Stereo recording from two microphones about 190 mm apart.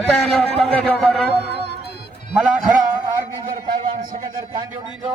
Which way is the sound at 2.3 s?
5° right (ahead or behind).